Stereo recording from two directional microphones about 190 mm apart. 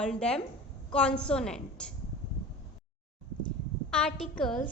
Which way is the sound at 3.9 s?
5° left (ahead or behind).